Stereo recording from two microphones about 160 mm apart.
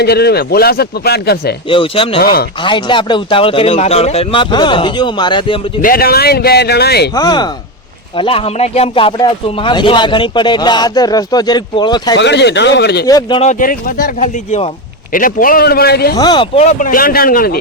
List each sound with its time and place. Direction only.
0.0 s a man's voice: 90° left
1.7 s speech: 35° left (ahead or behind)
5.8 s a man's voice: 70° left (ahead or behind); by 7.1 s 85° left
7.2 s speech: 25° left (ahead or behind)
12.2 s speech: 90° left
13.1 s speech: 25° left (ahead or behind)
13.4 s a man's voice: 55° left (ahead or behind); by 16.1 s 75° left (ahead or behind)
16.1 s speech: 25° left (ahead or behind)
16.6 s speech: 50° left (ahead or behind); by 17.6 s 65° left (ahead or behind)